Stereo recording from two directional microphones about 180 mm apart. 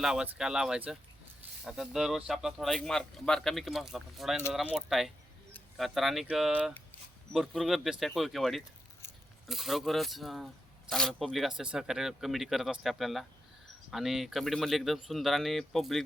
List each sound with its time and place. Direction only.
0.0 s speech: 5° right (ahead or behind)